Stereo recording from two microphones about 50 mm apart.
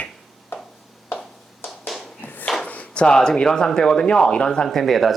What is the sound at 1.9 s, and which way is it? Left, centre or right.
Tap, centre.